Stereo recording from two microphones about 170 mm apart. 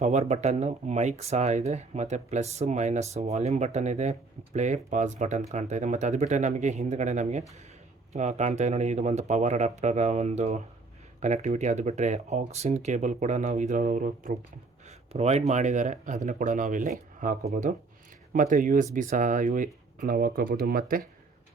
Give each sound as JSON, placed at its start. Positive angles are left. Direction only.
{"t": 0.0, "sound": "speech", "side_deg": -40}
{"t": 14.8, "sound": "speech", "side_deg": -40}